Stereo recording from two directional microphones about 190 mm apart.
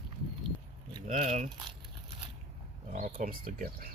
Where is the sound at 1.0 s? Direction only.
35° right (ahead or behind).